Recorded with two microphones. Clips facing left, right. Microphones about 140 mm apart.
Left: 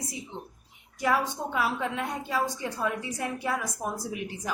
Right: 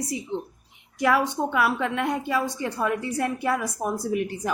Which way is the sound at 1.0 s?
70° right (ahead or behind).